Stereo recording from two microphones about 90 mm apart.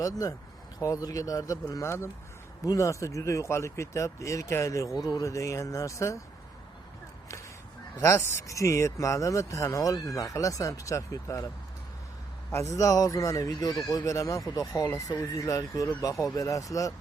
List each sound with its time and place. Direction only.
0.0 s speech: 40° left (ahead or behind)
8.0 s speech: 30° left (ahead or behind)
12.5 s speech: 35° left (ahead or behind)